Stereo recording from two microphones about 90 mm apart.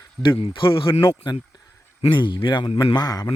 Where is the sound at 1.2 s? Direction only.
60° left (ahead or behind); by 2.9 s 80° left.